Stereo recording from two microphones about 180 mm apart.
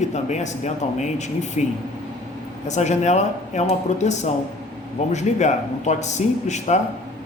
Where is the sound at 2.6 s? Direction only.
40° left (ahead or behind).